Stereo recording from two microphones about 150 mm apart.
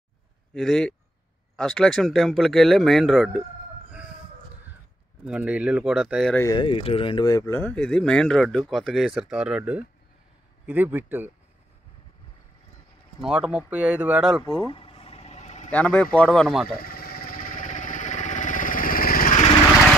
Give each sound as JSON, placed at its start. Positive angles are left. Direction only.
{"t": 0.6, "sound": "speech", "side_deg": 5}
{"t": 5.2, "sound": "speech", "side_deg": -10}
{"t": 6.5, "sound": "speech", "side_deg": 35}
{"t": 7.2, "sound": "speech", "side_deg": 20}
{"t": 7.6, "sound": "speech", "side_deg": 5}
{"t": 13.2, "sound": "speech", "side_deg": -5}
{"t": 14.7, "sound": "vehicle", "side_deg": 40}
{"t": 15.7, "sound": "speech", "side_deg": 10}
{"t": 16.7, "sound": "a sound", "side_deg": 75}